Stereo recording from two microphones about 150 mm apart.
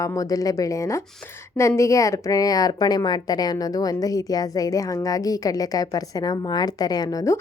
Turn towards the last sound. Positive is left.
turn(degrees=25)  # may be behind; listen again after turning